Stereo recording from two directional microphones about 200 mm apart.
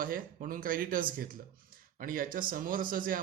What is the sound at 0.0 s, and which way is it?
Speech, 45° right (ahead or behind).